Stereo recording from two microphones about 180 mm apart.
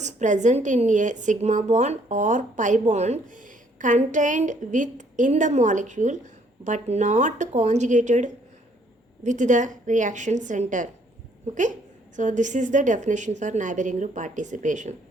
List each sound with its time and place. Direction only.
0.0 s speech: 40° right (ahead or behind)
12.1 s speech: 45° right (ahead or behind)